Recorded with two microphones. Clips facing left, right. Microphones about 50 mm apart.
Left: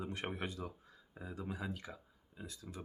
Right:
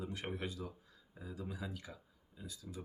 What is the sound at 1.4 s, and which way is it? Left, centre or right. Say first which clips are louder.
Speech: left 3 dB; left.